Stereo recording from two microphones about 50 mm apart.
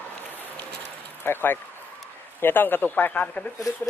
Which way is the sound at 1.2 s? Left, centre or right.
Left.